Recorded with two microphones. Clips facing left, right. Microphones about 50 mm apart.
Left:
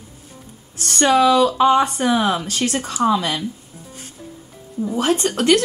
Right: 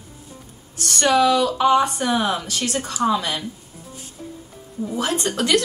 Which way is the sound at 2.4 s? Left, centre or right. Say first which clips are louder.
Left 3 dB; left.